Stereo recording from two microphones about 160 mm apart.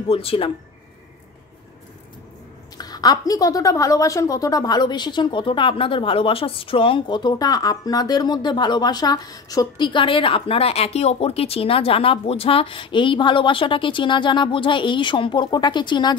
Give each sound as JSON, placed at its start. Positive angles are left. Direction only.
{"t": 0.1, "sound": "a woman's voice", "side_deg": 35}
{"t": 2.8, "sound": "a woman's voice", "side_deg": 25}